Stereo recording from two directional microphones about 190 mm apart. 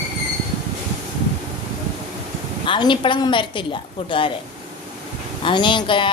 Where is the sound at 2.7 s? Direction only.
25° left (ahead or behind).